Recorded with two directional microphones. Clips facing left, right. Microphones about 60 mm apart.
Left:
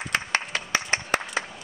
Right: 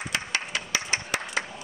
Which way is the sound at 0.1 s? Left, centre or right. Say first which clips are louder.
Left 5 dB; left.